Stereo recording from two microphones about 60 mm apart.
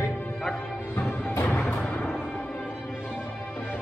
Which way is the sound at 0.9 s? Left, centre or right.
Left.